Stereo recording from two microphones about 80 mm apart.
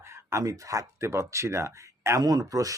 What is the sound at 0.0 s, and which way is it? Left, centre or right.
Speech, right.